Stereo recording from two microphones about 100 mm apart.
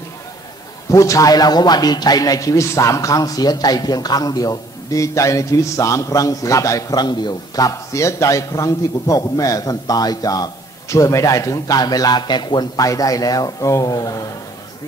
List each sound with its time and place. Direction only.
0.8 s a man's voice: 35° left (ahead or behind)